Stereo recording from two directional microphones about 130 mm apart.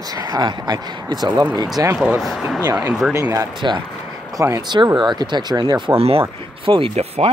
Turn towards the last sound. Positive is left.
turn(degrees=-55)  # may be behind; listen again after turning